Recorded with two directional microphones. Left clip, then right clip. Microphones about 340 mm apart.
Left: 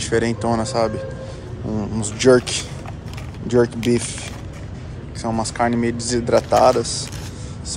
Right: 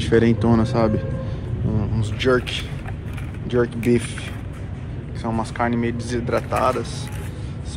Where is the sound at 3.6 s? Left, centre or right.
Centre.